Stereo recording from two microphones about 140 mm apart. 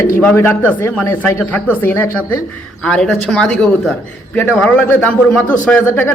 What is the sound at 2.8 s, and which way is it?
A man's voice, 5° left (ahead or behind).